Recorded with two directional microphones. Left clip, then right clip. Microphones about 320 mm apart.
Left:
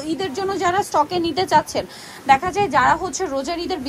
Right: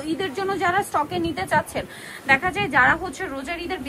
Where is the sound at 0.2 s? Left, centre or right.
Centre.